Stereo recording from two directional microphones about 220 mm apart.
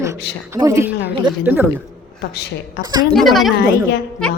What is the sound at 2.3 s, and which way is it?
Speech, 50° left (ahead or behind).